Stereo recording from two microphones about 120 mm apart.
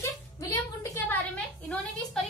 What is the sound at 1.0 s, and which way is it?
A woman's voice, 15° left (ahead or behind).